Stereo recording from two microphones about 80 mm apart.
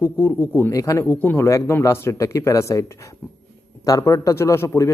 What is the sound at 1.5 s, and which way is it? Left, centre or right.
A man's voice, left.